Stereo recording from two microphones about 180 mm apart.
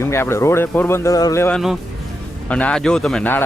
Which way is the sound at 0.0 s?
15° left (ahead or behind).